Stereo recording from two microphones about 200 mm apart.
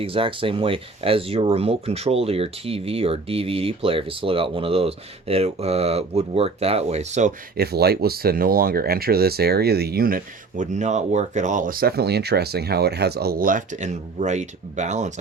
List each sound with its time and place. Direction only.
0.0 s speech: 25° right (ahead or behind)
7.5 s speech: 50° right (ahead or behind); by 15.1 s 35° right (ahead or behind)